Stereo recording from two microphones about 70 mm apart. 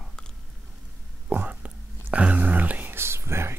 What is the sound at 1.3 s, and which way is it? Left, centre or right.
Whispering, right.